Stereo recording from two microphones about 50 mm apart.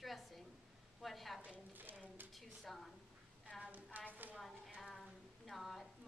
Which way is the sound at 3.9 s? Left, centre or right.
Right.